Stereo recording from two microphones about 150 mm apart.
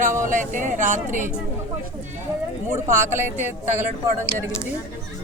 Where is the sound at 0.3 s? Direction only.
60° right (ahead or behind).